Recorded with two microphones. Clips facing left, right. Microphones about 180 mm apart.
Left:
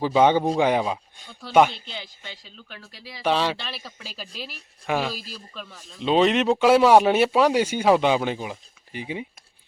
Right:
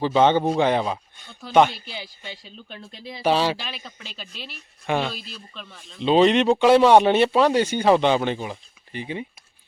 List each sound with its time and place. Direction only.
0.0 s speech: 10° left (ahead or behind)
2.0 s speech: 15° right (ahead or behind)
3.2 s speech: 5° right (ahead or behind)